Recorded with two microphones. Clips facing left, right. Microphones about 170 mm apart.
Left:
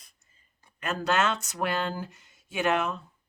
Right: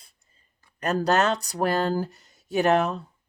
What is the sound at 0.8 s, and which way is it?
Speech, 40° right (ahead or behind).